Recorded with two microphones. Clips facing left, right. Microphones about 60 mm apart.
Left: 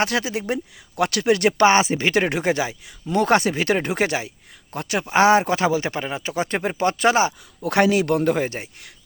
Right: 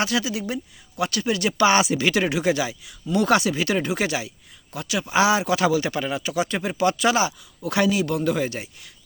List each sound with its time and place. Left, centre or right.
0.0 s speech: left
1.6 s a man's voice: left